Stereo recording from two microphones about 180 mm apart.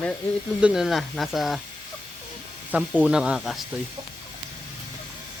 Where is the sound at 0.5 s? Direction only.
5° right (ahead or behind).